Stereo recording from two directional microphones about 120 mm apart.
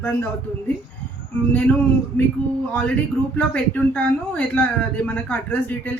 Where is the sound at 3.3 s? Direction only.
10° left (ahead or behind).